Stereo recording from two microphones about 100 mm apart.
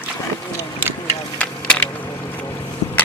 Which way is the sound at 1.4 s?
10° left (ahead or behind).